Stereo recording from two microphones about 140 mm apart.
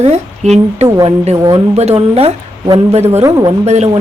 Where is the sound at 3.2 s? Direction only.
25° right (ahead or behind).